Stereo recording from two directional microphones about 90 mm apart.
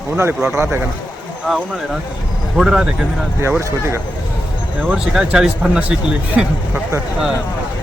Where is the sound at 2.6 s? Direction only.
5° right (ahead or behind).